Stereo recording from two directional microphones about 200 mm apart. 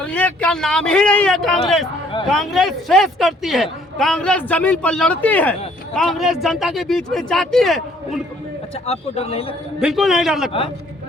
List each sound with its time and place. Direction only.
0.0 s speech: 5° left (ahead or behind)
8.9 s speech: 30° left (ahead or behind)
9.8 s speech: centre (ahead or behind)